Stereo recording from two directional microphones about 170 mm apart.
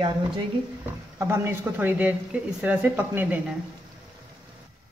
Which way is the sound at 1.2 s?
15° right (ahead or behind).